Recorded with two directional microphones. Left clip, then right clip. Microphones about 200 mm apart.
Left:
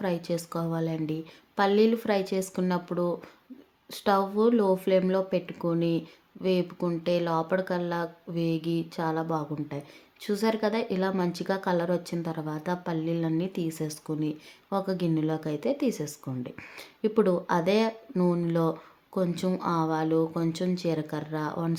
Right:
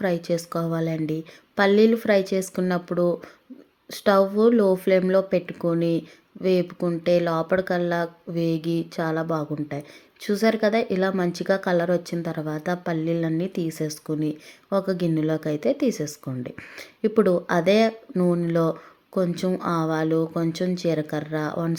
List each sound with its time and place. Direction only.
0.0 s speech: 20° right (ahead or behind)